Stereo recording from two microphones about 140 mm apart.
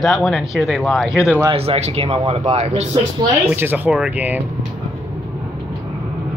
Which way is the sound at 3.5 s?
15° right (ahead or behind).